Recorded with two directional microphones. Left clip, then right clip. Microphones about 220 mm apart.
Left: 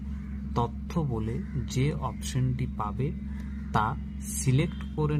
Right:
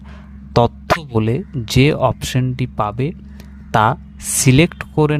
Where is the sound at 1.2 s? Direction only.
45° right (ahead or behind).